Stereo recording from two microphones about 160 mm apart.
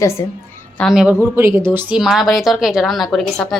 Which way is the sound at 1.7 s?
5° right (ahead or behind).